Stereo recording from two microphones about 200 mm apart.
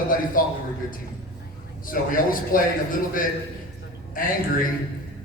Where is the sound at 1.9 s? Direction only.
45° left (ahead or behind).